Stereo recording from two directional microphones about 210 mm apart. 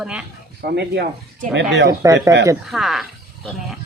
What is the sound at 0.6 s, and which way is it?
Speech, 50° right (ahead or behind).